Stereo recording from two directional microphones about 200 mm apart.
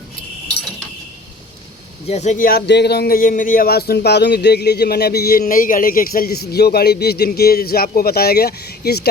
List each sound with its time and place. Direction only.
2.0 s speech: 35° left (ahead or behind); by 9.0 s 50° left (ahead or behind)